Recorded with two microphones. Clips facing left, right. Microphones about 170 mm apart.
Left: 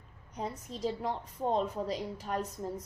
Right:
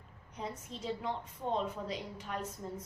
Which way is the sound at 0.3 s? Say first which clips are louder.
Left 4 dB; 40° left (ahead or behind).